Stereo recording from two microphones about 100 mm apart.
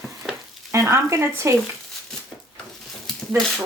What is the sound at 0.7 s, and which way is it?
Speech, 30° right (ahead or behind).